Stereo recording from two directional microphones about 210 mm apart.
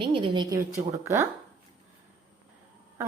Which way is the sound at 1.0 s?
10° right (ahead or behind).